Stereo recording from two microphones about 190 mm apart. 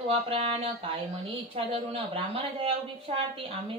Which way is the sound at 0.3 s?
30° right (ahead or behind).